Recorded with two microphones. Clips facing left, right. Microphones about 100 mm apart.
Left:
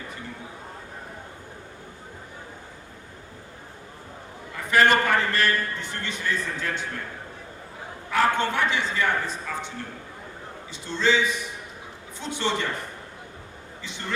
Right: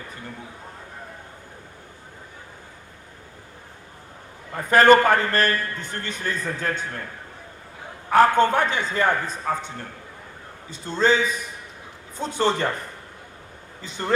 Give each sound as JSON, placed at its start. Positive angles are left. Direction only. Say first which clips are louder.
{"t": 4.5, "sound": "a man's voice", "louder": "right 5 dB", "side_deg": -40}
{"t": 8.1, "sound": "a man's voice", "louder": "right 6 dB", "side_deg": -45}
{"t": 13.8, "sound": "a man's voice", "louder": "right 6 dB", "side_deg": -40}